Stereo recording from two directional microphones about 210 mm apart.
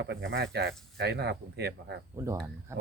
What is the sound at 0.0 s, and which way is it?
Speech, 50° right (ahead or behind).